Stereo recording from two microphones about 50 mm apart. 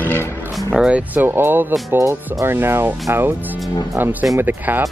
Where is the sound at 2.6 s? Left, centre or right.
Right.